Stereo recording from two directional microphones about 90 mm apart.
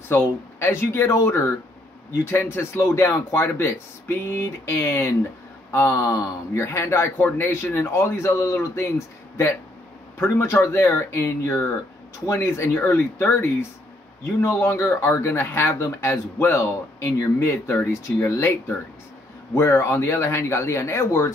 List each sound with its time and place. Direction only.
0.1 s speech: 25° left (ahead or behind)
2.5 s speech: 30° left (ahead or behind)